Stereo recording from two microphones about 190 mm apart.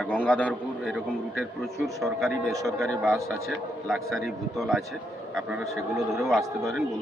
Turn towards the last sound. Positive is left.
turn(degrees=0)  # may be behind; listen again after turning